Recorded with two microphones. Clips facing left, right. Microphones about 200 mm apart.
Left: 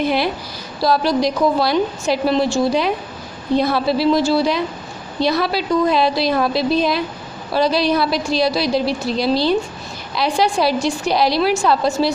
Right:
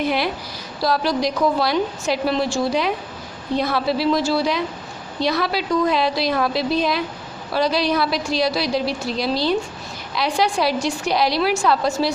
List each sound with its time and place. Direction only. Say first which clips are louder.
0.0 s a woman's voice: left 3 dB; 30° left (ahead or behind)